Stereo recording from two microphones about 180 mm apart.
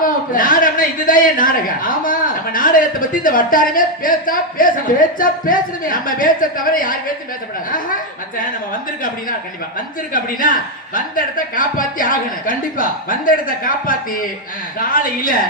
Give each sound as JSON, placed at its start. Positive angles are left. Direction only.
{"t": 0.0, "sound": "a man's voice", "side_deg": 50}
{"t": 9.7, "sound": "a man's voice", "side_deg": 50}